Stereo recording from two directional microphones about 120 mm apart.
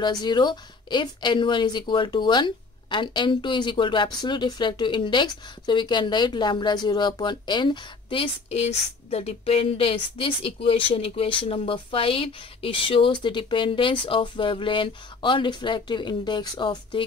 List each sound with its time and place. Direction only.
0.0 s a woman's voice: 35° left (ahead or behind)